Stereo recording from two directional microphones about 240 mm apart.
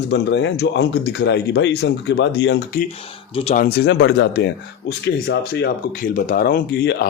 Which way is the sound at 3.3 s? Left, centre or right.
Left.